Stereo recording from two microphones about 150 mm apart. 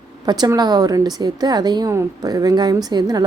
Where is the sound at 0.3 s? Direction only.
25° right (ahead or behind).